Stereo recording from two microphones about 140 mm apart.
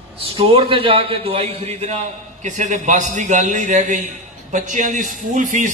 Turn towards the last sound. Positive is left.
turn(degrees=-65)  # may be behind; listen again after turning